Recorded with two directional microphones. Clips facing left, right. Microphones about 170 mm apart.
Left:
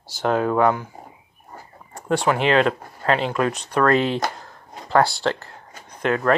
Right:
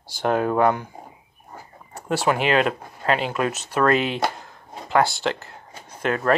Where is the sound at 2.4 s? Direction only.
30° left (ahead or behind).